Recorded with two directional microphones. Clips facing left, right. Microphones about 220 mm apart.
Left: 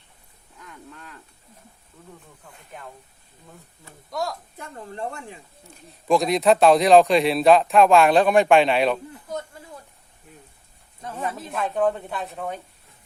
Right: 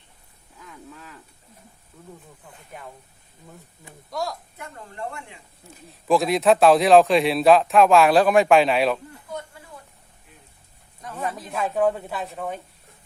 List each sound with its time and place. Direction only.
0.6 s cattle: centre (ahead or behind)
2.4 s speech: 5° right (ahead or behind)
4.1 s speech: centre (ahead or behind)
4.5 s speech: 30° left (ahead or behind)
5.9 s speech: centre (ahead or behind)
11.5 s speech: 5° right (ahead or behind)